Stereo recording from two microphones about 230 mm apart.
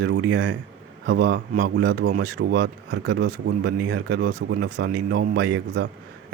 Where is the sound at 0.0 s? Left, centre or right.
Right.